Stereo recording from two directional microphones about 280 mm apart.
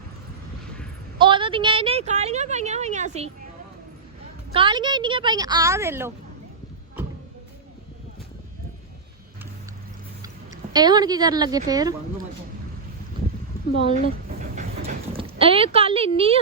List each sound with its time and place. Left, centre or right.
1.2 s a woman's voice: centre
4.5 s speech: centre
10.7 s speech: centre
14.5 s a sound: right